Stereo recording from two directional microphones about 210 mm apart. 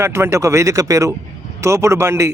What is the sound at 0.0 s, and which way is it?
A man's voice, 10° right (ahead or behind).